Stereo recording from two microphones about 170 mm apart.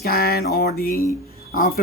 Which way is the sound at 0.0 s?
65° left (ahead or behind).